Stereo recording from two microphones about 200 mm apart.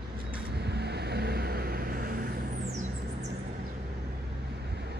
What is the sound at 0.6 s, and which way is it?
Vehicle, 55° right (ahead or behind).